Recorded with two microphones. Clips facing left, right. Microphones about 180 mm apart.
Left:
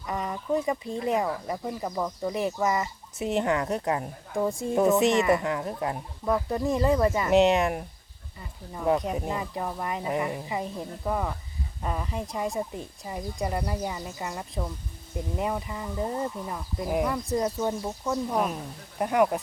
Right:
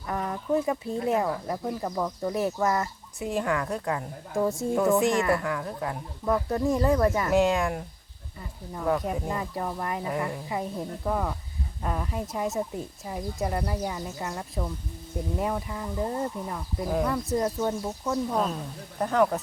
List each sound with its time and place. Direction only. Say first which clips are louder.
0.1 s speech: right 1 dB; centre (ahead or behind)
3.2 s a woman's voice: left 2 dB; 20° left (ahead or behind)
4.4 s speech: right 1 dB; centre (ahead or behind)
4.7 s a woman's voice: left 2 dB; 20° left (ahead or behind)
6.2 s speech: right 1 dB; centre (ahead or behind)
7.3 s a woman's voice: left 2 dB; 20° left (ahead or behind)
9.4 s speech: even; 5° left (ahead or behind)
10.1 s speech: left 4 dB; 15° left (ahead or behind)
10.5 s speech: right 1 dB; centre (ahead or behind)
17.2 s speech: even; centre (ahead or behind)